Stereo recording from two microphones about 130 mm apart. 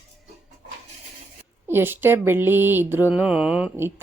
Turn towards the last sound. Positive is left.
turn(degrees=-15)  # may be behind; listen again after turning